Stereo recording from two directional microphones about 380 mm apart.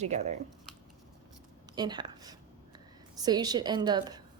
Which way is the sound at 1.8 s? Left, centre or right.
Centre.